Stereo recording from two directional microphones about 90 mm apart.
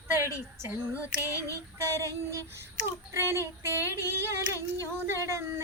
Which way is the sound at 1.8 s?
35° right (ahead or behind).